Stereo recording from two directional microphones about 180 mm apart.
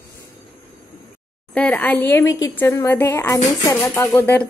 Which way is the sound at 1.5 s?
10° left (ahead or behind).